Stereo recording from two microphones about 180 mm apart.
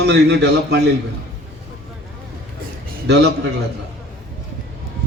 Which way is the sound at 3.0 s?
70° right (ahead or behind).